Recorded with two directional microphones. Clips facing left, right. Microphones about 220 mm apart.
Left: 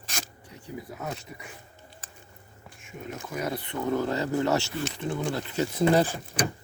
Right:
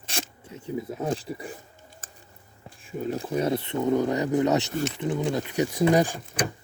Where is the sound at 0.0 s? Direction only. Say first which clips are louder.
Right 4 dB; 30° right (ahead or behind).